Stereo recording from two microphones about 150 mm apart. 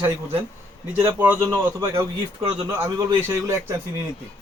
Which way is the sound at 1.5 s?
25° right (ahead or behind).